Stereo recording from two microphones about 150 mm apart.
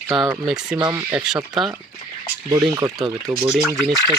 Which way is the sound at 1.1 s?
5° right (ahead or behind).